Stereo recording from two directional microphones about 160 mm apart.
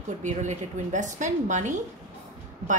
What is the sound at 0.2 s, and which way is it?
A woman's voice, 50° right (ahead or behind).